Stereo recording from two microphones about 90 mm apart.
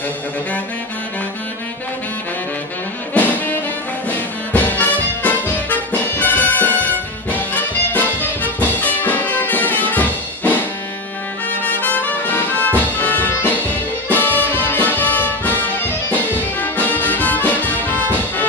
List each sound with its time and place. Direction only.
3.2 s music: 20° left (ahead or behind)
11.8 s music: 20° left (ahead or behind)